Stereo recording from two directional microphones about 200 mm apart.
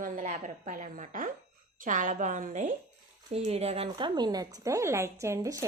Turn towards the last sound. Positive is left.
turn(degrees=-15)  # may be behind; listen again after turning